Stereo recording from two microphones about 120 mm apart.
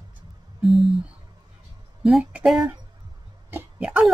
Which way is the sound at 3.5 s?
5° right (ahead or behind).